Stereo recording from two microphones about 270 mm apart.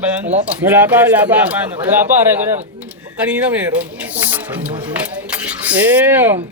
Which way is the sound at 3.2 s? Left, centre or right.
Centre.